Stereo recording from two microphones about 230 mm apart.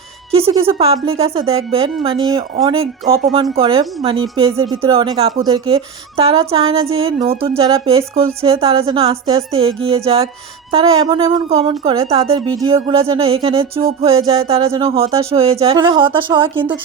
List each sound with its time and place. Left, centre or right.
0.3 s speech: right